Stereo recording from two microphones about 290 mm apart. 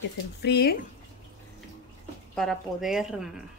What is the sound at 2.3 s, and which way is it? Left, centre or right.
Speech, centre.